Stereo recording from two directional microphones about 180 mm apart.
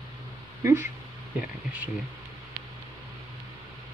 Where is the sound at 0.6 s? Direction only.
15° right (ahead or behind).